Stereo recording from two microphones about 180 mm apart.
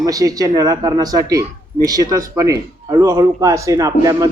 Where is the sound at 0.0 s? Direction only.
20° right (ahead or behind).